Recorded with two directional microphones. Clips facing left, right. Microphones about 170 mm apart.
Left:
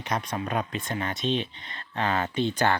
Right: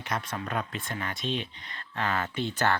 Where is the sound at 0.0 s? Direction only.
15° left (ahead or behind).